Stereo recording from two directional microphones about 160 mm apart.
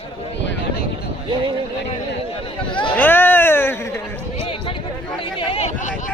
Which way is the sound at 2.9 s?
10° left (ahead or behind).